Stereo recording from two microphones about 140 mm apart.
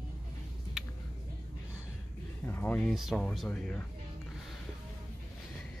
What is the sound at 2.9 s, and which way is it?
Speech, centre (ahead or behind).